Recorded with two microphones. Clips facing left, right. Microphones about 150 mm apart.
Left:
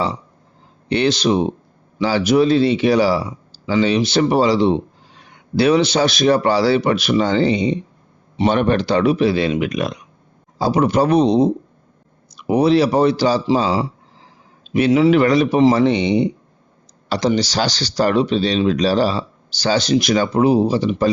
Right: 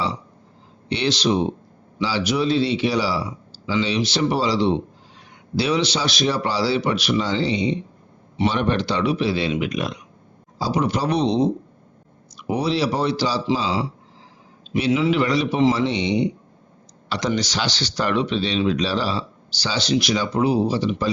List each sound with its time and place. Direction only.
0.9 s speech: 50° left (ahead or behind)
17.1 s speech: 30° left (ahead or behind); by 21.1 s 50° left (ahead or behind)